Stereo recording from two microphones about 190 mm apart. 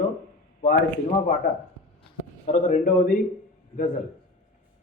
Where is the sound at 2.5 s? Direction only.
40° left (ahead or behind).